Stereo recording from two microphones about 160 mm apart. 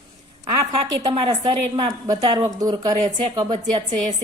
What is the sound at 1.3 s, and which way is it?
A woman's voice, 25° right (ahead or behind).